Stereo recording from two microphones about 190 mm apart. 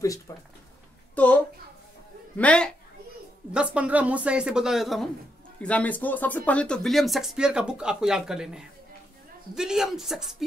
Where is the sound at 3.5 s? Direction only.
5° right (ahead or behind).